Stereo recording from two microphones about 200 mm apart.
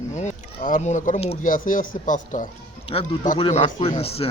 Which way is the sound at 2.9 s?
25° left (ahead or behind).